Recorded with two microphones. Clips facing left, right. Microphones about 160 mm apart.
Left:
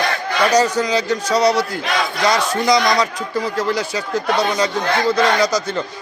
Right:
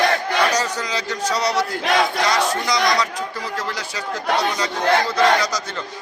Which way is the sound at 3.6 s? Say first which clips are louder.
Left 8 dB; 10° left (ahead or behind).